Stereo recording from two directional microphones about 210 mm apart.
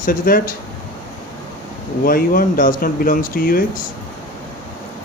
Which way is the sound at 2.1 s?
45° left (ahead or behind).